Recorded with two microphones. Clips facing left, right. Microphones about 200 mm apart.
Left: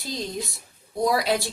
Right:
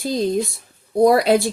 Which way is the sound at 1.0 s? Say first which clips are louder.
Right 9 dB; 55° right (ahead or behind).